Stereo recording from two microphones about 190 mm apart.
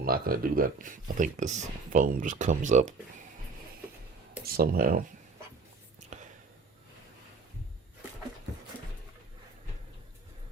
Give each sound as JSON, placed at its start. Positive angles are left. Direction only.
{"t": 0.0, "sound": "speech", "side_deg": -50}
{"t": 4.4, "sound": "speech", "side_deg": -55}
{"t": 6.1, "sound": "whispering", "side_deg": -40}